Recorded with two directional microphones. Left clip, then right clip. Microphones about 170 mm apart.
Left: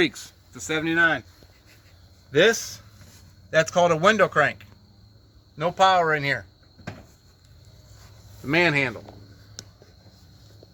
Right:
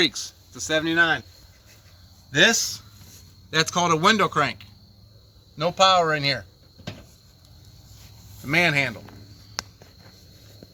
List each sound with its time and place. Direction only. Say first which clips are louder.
0.7 s speech: right 1 dB; 35° left (ahead or behind)
2.3 s speech: even; 55° left (ahead or behind)
3.5 s speech: left 2 dB; 30° left (ahead or behind)
5.5 s speech: right 1 dB; 5° right (ahead or behind)
8.4 s speech: even; 60° left (ahead or behind)